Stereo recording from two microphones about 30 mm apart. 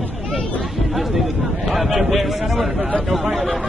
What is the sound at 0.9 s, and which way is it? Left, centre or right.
A man's voice, centre.